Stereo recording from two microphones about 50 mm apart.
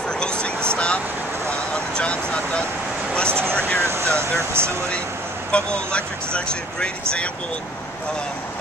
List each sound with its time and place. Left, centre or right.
0.2 s vehicle: centre
3.3 s vehicle: right
3.5 s vehicle: left
3.8 s a sound: right
5.5 s speech: left